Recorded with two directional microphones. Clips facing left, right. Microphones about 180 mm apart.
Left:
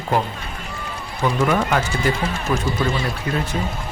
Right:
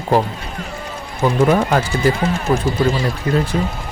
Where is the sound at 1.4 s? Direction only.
35° right (ahead or behind).